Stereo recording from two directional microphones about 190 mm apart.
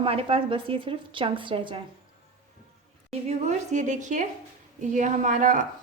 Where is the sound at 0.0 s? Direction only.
30° right (ahead or behind).